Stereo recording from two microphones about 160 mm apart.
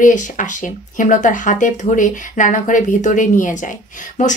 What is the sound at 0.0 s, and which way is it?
A woman's voice, 50° left (ahead or behind).